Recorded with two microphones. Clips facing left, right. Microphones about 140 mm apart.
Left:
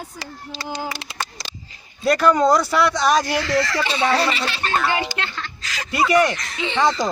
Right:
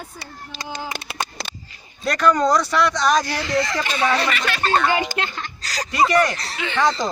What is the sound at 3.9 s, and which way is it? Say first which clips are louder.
Speech: left 1 dB; 25° left (ahead or behind).